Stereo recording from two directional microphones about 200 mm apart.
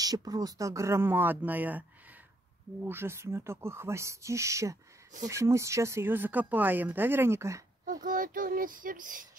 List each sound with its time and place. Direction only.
0.0 s speech: 20° right (ahead or behind)
7.8 s speech: 40° right (ahead or behind)